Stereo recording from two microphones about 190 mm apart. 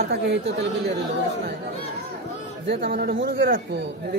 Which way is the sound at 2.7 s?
55° right (ahead or behind).